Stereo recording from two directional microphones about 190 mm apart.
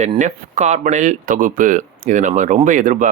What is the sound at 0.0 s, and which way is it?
Speech, 40° right (ahead or behind).